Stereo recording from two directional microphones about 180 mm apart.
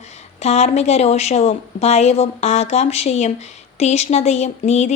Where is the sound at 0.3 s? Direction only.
35° left (ahead or behind).